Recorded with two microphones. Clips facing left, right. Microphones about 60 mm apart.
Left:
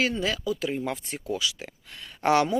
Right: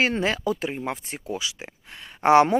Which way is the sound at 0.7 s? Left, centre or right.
Right.